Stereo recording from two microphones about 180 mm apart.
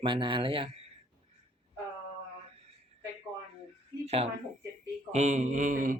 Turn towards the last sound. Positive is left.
turn(degrees=-50)  # may be behind; listen again after turning